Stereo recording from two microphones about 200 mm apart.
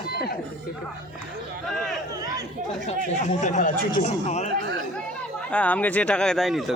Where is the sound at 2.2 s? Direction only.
20° right (ahead or behind).